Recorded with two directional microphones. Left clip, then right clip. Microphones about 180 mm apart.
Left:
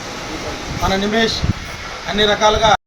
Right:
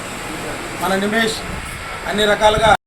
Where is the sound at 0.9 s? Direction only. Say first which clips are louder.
Left 1 dB; 15° right (ahead or behind).